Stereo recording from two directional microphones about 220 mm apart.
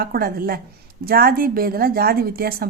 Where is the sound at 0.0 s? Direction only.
45° right (ahead or behind).